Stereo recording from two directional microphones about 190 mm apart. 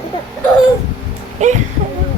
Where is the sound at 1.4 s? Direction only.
40° right (ahead or behind).